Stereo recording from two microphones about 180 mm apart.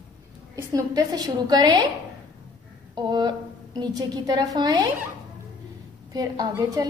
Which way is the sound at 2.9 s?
25° right (ahead or behind).